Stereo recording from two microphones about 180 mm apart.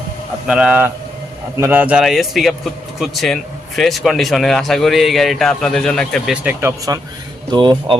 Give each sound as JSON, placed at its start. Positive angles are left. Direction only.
{"t": 0.4, "sound": "a man's voice", "side_deg": -5}